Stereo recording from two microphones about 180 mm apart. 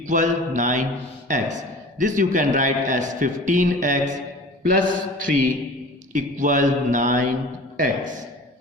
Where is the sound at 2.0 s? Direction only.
45° right (ahead or behind).